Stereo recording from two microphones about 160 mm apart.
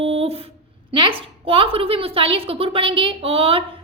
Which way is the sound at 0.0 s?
40° right (ahead or behind).